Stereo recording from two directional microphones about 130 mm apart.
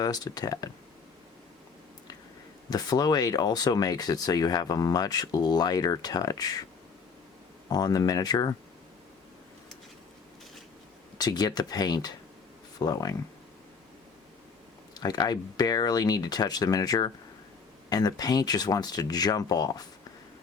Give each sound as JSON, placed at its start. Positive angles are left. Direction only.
{"t": 0.0, "sound": "speech", "side_deg": 30}
{"t": 2.6, "sound": "speech", "side_deg": 30}
{"t": 7.7, "sound": "speech", "side_deg": 30}
{"t": 11.2, "sound": "speech", "side_deg": 30}
{"t": 14.9, "sound": "speech", "side_deg": 30}